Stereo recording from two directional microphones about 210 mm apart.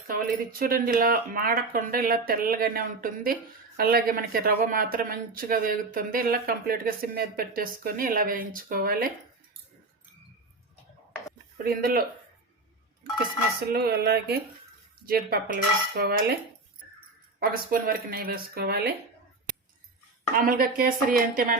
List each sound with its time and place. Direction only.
0.6 s speech: 45° right (ahead or behind)
11.5 s speech: 45° right (ahead or behind)
13.6 s speech: 45° right (ahead or behind)
17.4 s speech: 45° right (ahead or behind)
20.4 s speech: 45° right (ahead or behind)